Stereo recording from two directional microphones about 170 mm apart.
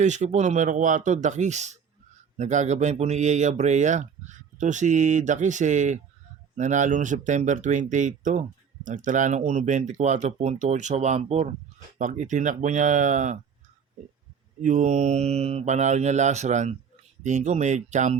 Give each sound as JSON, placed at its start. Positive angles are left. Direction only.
{"t": 0.0, "sound": "speech", "side_deg": -45}
{"t": 14.6, "sound": "speech", "side_deg": -45}